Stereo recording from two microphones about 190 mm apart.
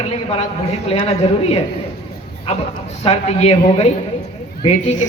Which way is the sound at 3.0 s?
35° left (ahead or behind).